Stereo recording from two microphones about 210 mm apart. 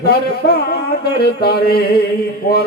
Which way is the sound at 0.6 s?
50° left (ahead or behind).